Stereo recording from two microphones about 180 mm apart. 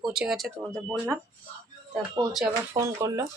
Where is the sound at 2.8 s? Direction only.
15° right (ahead or behind).